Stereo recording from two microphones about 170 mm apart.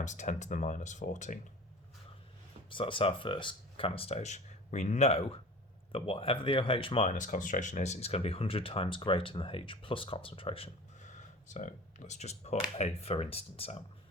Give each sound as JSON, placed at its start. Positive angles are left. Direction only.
{"t": 0.0, "sound": "speech", "side_deg": 45}
{"t": 2.6, "sound": "speech", "side_deg": 30}